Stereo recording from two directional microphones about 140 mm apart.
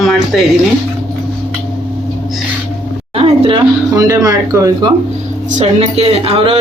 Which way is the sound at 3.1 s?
45° right (ahead or behind).